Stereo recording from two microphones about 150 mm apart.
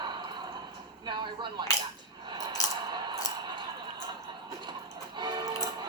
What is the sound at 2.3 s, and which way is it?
Coin, 25° right (ahead or behind).